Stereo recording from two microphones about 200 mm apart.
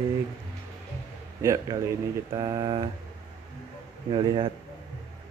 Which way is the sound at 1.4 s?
15° right (ahead or behind).